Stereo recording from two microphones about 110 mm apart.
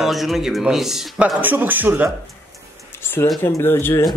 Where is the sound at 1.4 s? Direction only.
15° right (ahead or behind).